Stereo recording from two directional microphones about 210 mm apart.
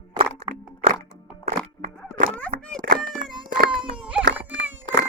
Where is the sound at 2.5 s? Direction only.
35° right (ahead or behind).